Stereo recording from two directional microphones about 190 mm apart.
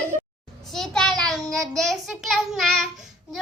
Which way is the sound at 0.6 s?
Centre (ahead or behind).